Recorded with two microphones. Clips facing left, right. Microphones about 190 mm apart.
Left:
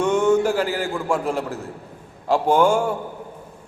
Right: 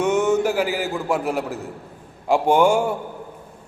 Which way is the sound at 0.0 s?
5° right (ahead or behind).